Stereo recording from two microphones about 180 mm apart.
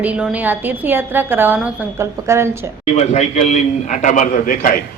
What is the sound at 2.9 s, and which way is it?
A man's voice, 40° left (ahead or behind).